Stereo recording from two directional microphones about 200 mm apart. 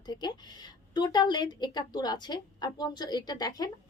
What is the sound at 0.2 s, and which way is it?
A woman's voice, 20° left (ahead or behind).